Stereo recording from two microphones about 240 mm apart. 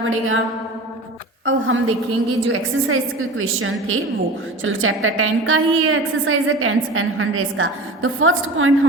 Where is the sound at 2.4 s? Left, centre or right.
Right.